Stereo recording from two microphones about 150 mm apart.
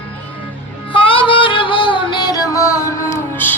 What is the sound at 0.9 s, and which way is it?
Music, 35° left (ahead or behind).